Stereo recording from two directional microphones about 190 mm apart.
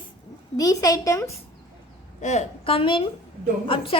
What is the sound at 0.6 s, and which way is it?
Speech, 20° left (ahead or behind).